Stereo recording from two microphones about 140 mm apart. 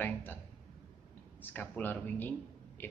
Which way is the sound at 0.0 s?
15° left (ahead or behind).